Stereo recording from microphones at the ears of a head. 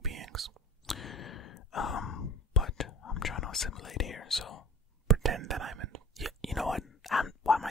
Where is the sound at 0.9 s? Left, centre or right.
Left.